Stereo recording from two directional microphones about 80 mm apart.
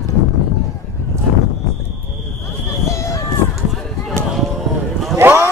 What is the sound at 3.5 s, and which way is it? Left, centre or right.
Run, centre.